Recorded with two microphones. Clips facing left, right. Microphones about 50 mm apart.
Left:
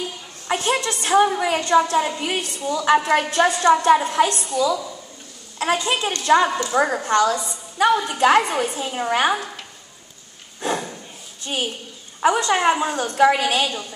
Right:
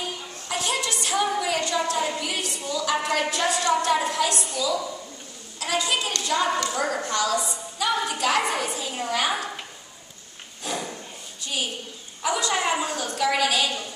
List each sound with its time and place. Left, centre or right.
0.5 s a woman's voice: left
5.6 s a woman's voice: left
10.6 s a sound: left
11.4 s a woman's voice: left